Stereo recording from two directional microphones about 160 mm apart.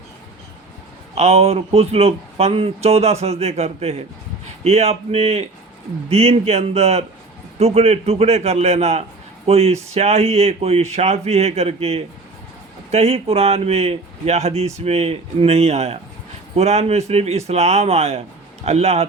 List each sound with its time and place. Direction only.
1.1 s speech: 40° right (ahead or behind)